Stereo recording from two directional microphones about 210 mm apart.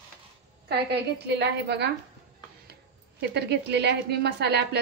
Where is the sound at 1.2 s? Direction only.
55° right (ahead or behind).